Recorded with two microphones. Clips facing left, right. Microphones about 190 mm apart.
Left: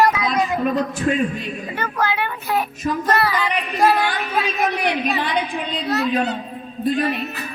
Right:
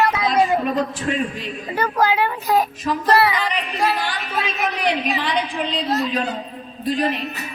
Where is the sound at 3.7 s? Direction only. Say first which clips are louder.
Left 7 dB; 50° left (ahead or behind); by 6.3 s 65° left (ahead or behind).